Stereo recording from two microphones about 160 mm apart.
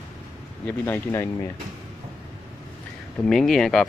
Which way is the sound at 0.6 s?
10° left (ahead or behind).